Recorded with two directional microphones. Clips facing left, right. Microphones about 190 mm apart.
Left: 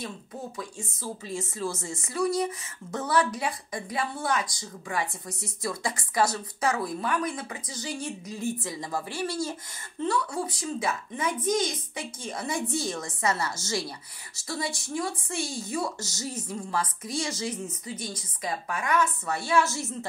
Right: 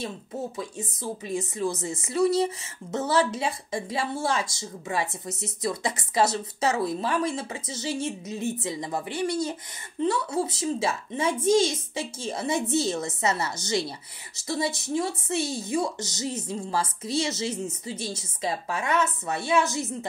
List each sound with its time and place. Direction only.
0.6 s a woman's voice: 20° right (ahead or behind)